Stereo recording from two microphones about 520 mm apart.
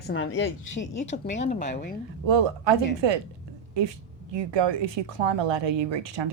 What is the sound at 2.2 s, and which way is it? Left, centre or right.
Speech, right.